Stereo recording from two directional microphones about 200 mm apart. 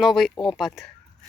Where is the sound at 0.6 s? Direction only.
Centre (ahead or behind).